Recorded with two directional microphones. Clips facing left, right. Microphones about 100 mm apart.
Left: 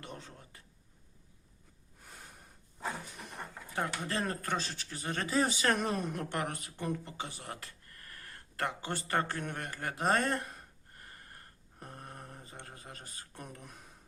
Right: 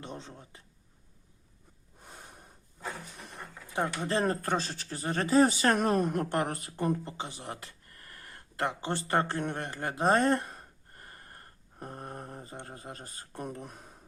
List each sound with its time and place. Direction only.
0.0 s speech: 25° right (ahead or behind)
3.8 s speech: 25° right (ahead or behind)
7.2 s speech: 25° right (ahead or behind)
11.8 s a sound: 35° right (ahead or behind)